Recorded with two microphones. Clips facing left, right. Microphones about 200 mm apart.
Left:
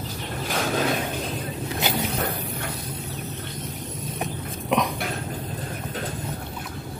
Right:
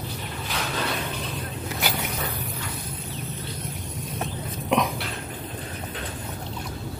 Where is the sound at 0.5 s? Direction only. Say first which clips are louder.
Left 6 dB; 45° left (ahead or behind).